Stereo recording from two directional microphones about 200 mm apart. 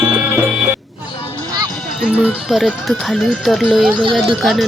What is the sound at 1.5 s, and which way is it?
Music, 20° right (ahead or behind).